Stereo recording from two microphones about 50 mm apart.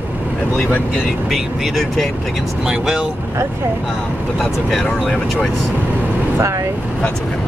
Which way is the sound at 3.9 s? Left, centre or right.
Centre.